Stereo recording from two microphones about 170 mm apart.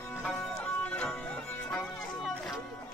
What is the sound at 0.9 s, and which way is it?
Music, 5° left (ahead or behind).